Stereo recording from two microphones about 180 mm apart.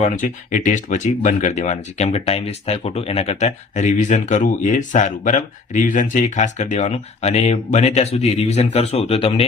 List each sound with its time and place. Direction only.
0.0 s speech: 45° left (ahead or behind)